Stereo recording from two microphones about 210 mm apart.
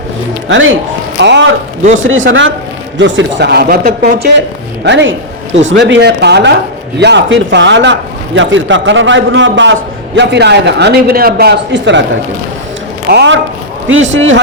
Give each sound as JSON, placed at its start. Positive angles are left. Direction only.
{"t": 0.4, "sound": "speech", "side_deg": -65}
{"t": 13.1, "sound": "a man's voice", "side_deg": -55}